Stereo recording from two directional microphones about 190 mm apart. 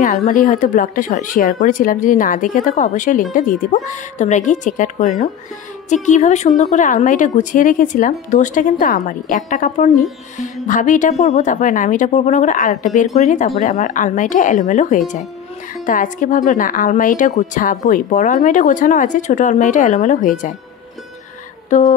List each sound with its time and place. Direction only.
0.3 s speech: 40° left (ahead or behind)
21.6 s music: 40° left (ahead or behind)